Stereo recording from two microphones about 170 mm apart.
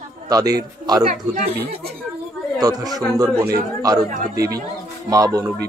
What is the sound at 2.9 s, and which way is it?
Speech, 20° right (ahead or behind).